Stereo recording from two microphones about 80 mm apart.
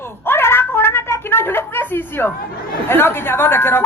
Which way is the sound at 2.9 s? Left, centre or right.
Left.